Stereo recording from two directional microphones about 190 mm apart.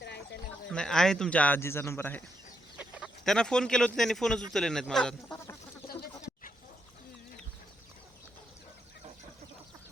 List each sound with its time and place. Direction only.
0.7 s speech: 5° left (ahead or behind)
2.7 s speech: centre (ahead or behind)